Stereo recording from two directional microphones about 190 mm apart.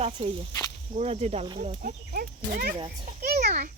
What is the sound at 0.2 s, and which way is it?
Speech, 35° right (ahead or behind).